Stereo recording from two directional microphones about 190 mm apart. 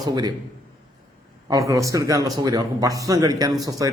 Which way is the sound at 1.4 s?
20° right (ahead or behind).